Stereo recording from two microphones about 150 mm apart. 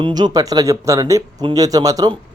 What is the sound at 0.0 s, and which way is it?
Speech, 25° right (ahead or behind).